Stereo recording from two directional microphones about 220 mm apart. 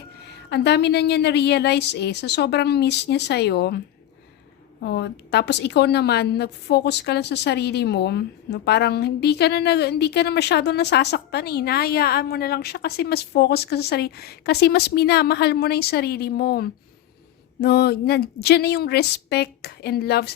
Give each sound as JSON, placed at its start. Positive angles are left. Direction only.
{"t": 0.3, "sound": "a woman's voice", "side_deg": 50}
{"t": 4.8, "sound": "a woman's voice", "side_deg": 50}